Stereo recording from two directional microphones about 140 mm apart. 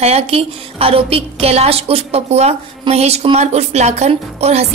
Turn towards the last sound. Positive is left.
turn(degrees=-50)  # may be behind; listen again after turning